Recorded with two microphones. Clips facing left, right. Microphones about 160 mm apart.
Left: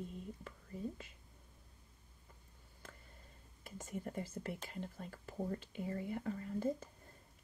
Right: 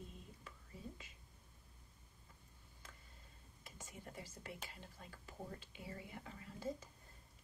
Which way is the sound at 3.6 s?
50° left (ahead or behind).